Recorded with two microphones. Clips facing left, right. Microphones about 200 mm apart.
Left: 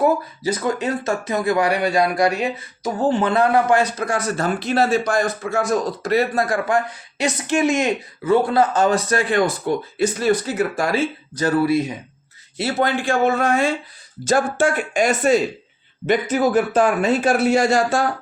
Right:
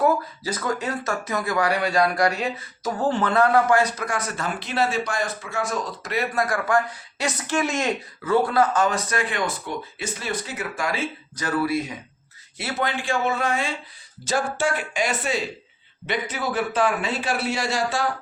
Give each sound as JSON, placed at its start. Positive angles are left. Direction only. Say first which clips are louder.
{"t": 0.4, "sound": "a man's voice", "louder": "left 6 dB", "side_deg": 20}